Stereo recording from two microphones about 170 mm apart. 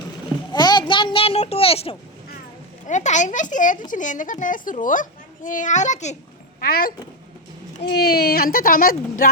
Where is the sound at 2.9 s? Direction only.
45° left (ahead or behind).